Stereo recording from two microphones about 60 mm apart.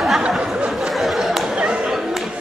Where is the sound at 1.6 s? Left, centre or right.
Centre.